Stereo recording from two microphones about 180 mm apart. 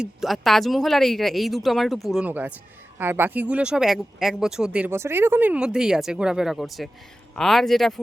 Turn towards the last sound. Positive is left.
turn(degrees=0)  # may be behind; listen again after turning